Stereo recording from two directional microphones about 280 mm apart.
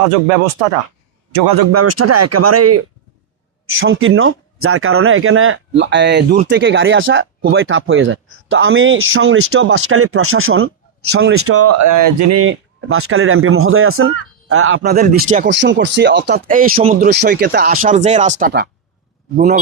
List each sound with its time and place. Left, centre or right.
1.7 s speech: right
3.7 s speech: right
12.4 s speech: right
14.8 s speech: right
15.4 s speech: right